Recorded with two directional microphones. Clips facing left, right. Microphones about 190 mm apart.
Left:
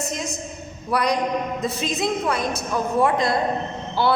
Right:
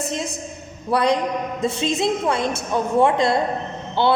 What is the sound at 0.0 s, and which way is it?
A woman's voice, 30° right (ahead or behind).